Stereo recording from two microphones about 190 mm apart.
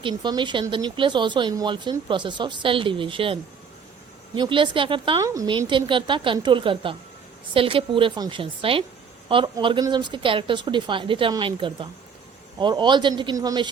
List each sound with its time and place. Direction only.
0.0 s speech: 25° right (ahead or behind)
4.4 s speech: 25° right (ahead or behind)